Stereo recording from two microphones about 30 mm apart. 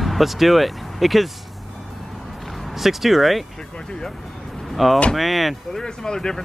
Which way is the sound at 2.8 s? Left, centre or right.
Centre.